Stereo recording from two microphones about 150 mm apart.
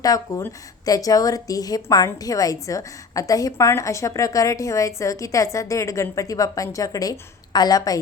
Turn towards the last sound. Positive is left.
turn(degrees=25)  # may be behind; listen again after turning